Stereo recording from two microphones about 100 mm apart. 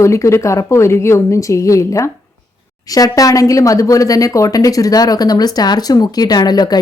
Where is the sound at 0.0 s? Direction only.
30° left (ahead or behind).